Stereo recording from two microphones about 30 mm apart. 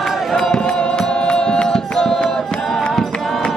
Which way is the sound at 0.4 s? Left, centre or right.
Centre.